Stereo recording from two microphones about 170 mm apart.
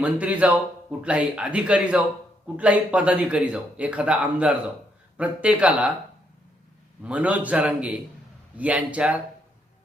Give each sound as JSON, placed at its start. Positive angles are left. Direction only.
{"t": 0.0, "sound": "speech", "side_deg": -10}
{"t": 7.0, "sound": "speech", "side_deg": -5}